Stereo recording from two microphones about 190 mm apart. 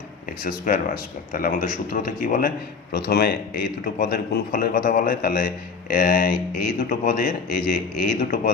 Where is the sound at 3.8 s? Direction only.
45° left (ahead or behind).